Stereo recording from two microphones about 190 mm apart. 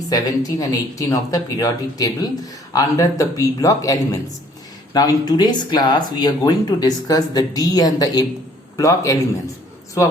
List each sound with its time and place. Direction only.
0.1 s a man's voice: 20° left (ahead or behind)